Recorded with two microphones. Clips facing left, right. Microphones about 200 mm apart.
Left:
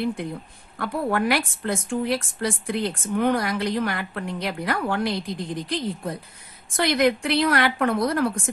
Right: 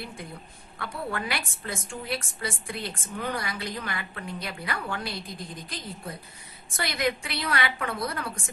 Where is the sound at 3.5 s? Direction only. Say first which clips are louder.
Left 10 dB; 70° left (ahead or behind).